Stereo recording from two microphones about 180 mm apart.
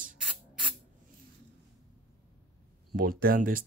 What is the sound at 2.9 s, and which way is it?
Speech, 55° right (ahead or behind).